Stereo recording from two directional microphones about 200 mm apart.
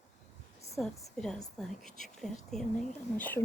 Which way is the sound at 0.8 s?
5° left (ahead or behind).